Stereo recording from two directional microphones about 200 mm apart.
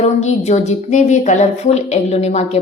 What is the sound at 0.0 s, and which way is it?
Speech, 35° left (ahead or behind).